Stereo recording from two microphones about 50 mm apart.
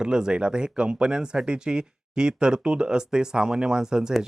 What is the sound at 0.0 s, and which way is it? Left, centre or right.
Speech, centre.